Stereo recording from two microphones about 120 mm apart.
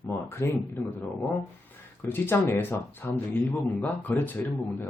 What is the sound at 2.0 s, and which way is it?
Speech, 15° left (ahead or behind).